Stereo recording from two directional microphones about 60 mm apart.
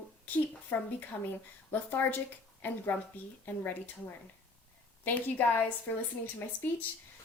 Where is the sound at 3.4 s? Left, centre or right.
Left.